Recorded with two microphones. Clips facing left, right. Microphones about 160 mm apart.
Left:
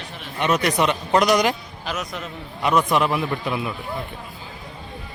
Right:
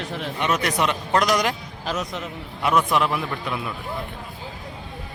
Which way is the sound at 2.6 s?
Centre (ahead or behind).